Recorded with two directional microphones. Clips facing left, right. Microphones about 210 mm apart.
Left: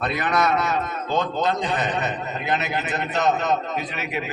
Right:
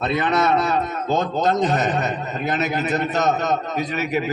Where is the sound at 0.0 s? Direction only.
25° right (ahead or behind).